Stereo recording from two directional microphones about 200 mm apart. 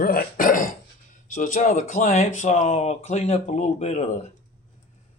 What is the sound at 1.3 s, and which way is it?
Speech, 40° left (ahead or behind).